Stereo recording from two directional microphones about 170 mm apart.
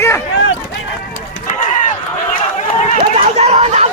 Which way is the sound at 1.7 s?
45° left (ahead or behind).